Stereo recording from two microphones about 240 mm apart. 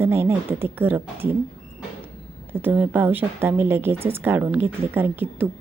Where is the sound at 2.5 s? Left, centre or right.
Centre.